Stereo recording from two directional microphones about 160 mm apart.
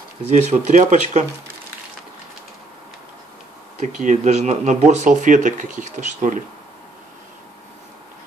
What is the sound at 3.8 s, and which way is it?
Speech, 50° right (ahead or behind).